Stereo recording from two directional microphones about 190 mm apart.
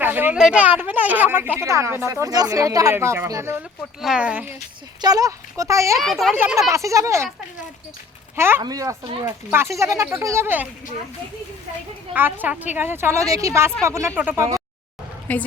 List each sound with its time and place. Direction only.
0.0 s speech: 10° right (ahead or behind)
4.0 s speech: 5° right (ahead or behind)
4.9 s speech: 20° right (ahead or behind)
6.0 s a child's voice: centre (ahead or behind)
6.3 s speech: 10° right (ahead or behind)
8.4 s speech: 10° right (ahead or behind)
12.1 s speech: 10° right (ahead or behind)
15.3 s a woman's voice: 10° left (ahead or behind)